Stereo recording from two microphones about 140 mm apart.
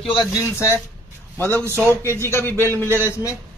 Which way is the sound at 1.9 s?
15° left (ahead or behind).